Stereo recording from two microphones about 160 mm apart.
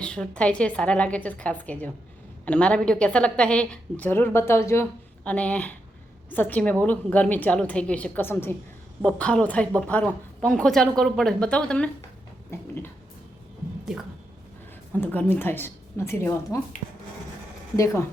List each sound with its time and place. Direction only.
0.0 s a woman's voice: 5° left (ahead or behind)
12.5 s a woman's voice: 15° left (ahead or behind)
15.0 s a woman's voice: 10° left (ahead or behind)
17.7 s speech: 20° left (ahead or behind)